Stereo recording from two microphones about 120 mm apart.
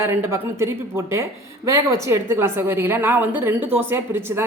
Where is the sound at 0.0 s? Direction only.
20° right (ahead or behind).